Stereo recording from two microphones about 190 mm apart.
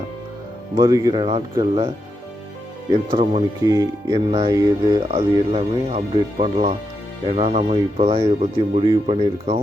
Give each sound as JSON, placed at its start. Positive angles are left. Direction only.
{"t": 0.8, "sound": "speech", "side_deg": -15}
{"t": 2.9, "sound": "speech", "side_deg": -25}
{"t": 3.6, "sound": "speech", "side_deg": -15}